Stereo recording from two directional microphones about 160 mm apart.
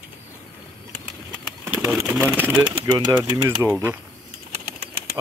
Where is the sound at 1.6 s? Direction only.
20° right (ahead or behind).